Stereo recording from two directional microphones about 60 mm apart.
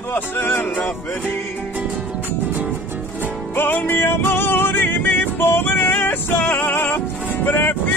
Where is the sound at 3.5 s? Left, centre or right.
Left.